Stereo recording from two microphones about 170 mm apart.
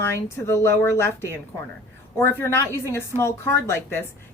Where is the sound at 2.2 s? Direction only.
15° left (ahead or behind).